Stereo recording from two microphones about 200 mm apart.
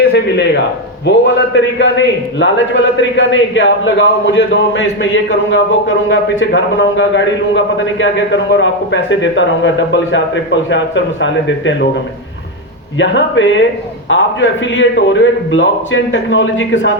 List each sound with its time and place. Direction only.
0.1 s a man's voice: 60° left (ahead or behind)
13.0 s a man's voice: 65° left (ahead or behind)